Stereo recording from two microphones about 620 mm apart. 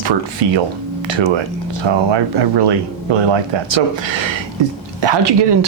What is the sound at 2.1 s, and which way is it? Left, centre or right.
Speech, right.